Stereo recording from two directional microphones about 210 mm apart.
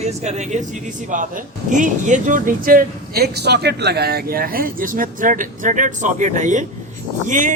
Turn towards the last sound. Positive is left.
turn(degrees=-35)  # may be behind; listen again after turning